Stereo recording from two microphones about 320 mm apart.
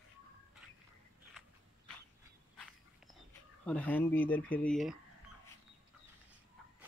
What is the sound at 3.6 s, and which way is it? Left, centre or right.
Speech, centre.